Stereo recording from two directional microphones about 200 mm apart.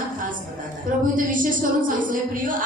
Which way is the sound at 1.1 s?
40° right (ahead or behind).